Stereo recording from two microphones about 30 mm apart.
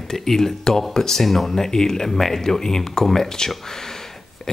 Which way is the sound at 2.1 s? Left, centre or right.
Centre.